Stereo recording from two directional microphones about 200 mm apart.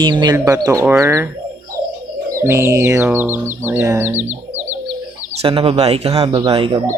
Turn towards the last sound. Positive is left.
turn(degrees=-25)  # may be behind; listen again after turning